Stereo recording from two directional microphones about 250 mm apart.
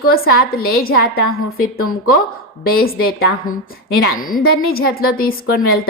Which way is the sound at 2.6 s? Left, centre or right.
Left.